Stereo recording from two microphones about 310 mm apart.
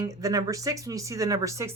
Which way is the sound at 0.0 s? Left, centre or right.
Centre.